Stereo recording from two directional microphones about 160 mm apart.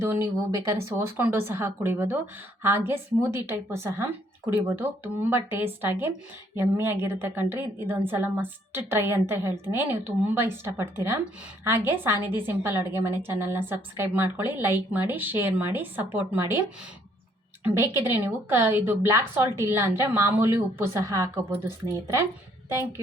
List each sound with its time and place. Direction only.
0.0 s a woman's voice: 15° right (ahead or behind)
22.7 s a woman's voice: 15° right (ahead or behind)